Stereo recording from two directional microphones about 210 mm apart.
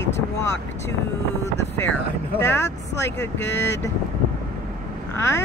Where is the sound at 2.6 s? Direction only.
55° left (ahead or behind).